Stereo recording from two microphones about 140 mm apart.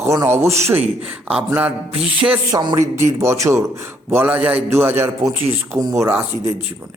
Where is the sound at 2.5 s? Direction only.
35° right (ahead or behind).